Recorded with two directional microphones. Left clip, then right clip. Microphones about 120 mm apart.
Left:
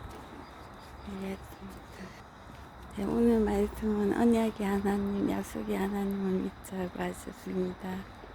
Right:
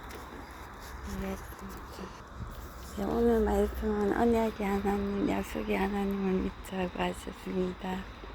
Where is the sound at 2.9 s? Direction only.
25° left (ahead or behind); by 7.1 s 5° left (ahead or behind).